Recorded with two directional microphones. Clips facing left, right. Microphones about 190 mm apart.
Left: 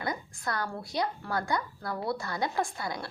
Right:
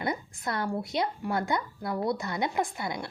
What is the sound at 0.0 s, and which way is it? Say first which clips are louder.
A woman's voice: right 2 dB; 25° right (ahead or behind).